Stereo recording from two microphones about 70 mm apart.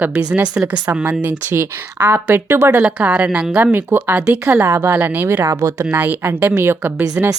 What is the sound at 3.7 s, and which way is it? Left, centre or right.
A woman's voice, right.